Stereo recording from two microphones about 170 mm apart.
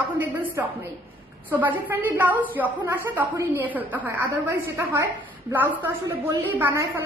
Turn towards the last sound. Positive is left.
turn(degrees=-15)  # may be behind; listen again after turning